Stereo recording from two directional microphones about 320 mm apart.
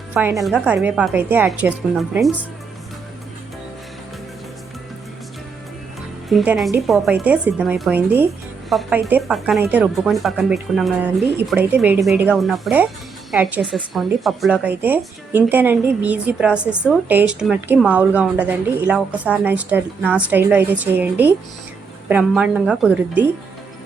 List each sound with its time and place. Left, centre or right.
0.1 s a woman's voice: centre
6.2 s a woman's voice: centre